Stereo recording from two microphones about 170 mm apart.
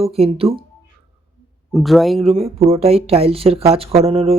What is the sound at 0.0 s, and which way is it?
Speech, 35° right (ahead or behind).